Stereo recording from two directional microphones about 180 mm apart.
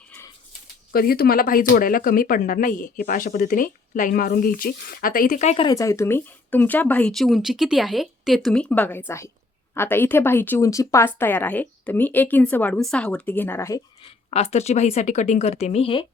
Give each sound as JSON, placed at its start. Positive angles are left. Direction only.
{"t": 0.9, "sound": "speech", "side_deg": 55}
{"t": 5.6, "sound": "speech", "side_deg": 15}
{"t": 14.0, "sound": "speech", "side_deg": 35}